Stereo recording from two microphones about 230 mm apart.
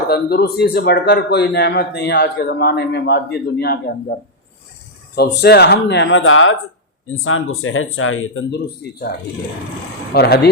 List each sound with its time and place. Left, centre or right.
0.1 s a man's voice: left
5.1 s a man's voice: left
10.2 s a man's voice: left